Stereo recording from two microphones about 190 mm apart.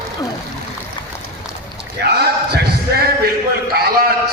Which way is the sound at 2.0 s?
60° right (ahead or behind).